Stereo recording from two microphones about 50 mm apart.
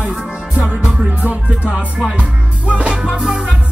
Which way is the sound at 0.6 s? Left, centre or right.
Right.